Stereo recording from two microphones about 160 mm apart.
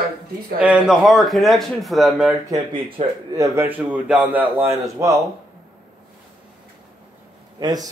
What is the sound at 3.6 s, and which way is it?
Speech, 10° right (ahead or behind).